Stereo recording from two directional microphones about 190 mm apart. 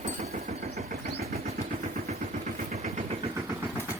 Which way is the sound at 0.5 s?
35° right (ahead or behind).